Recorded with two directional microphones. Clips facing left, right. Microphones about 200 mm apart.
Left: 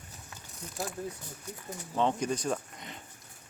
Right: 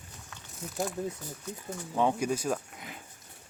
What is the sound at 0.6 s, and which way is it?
Speech, 5° right (ahead or behind).